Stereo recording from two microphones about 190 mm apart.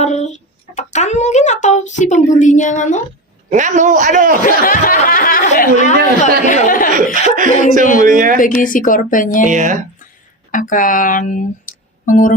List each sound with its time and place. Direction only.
0.0 s speech: 35° left (ahead or behind)
3.5 s a man's voice: 40° right (ahead or behind)
4.4 s a woman's voice: 45° left (ahead or behind)
6.9 s a man's voice: 45° right (ahead or behind)
8.4 s a woman's voice: 45° left (ahead or behind)
9.5 s speech: 40° right (ahead or behind)
10.5 s speech: 45° left (ahead or behind)